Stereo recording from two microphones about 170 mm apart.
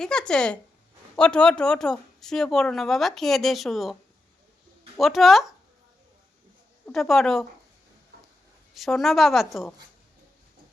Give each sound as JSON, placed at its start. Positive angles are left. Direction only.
{"t": 0.0, "sound": "speech", "side_deg": 5}
{"t": 4.9, "sound": "speech", "side_deg": 0}
{"t": 6.8, "sound": "speech", "side_deg": 0}
{"t": 8.7, "sound": "speech", "side_deg": 0}